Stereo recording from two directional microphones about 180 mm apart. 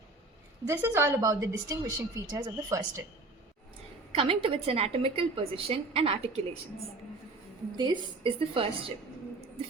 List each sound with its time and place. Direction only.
0.7 s a woman's voice: 15° right (ahead or behind)
4.1 s a woman's voice: 30° right (ahead or behind)
7.8 s speech: 25° right (ahead or behind)